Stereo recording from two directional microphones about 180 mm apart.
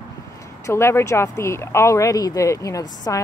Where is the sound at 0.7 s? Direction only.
15° left (ahead or behind).